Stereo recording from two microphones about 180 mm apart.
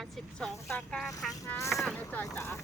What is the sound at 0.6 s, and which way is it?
Speech, 10° left (ahead or behind).